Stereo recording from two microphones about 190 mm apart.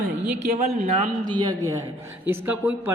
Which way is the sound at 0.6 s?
35° right (ahead or behind).